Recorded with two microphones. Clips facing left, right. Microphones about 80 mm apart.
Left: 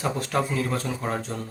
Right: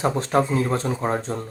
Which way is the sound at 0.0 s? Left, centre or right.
Right.